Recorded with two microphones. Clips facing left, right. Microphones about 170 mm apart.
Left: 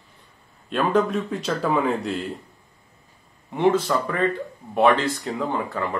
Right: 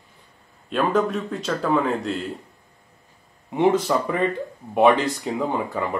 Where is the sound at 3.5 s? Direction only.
15° right (ahead or behind).